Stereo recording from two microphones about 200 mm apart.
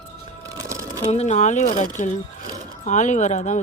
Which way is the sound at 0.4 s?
15° right (ahead or behind).